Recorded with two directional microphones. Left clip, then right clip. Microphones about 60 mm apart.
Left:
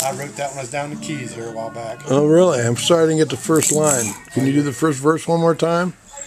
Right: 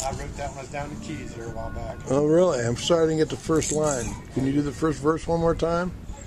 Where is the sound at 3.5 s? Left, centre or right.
Centre.